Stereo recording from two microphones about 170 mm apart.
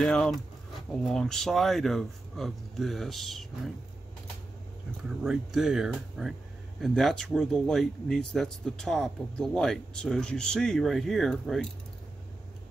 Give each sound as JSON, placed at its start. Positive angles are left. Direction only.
{"t": 0.0, "sound": "speech", "side_deg": 5}
{"t": 5.2, "sound": "speech", "side_deg": -5}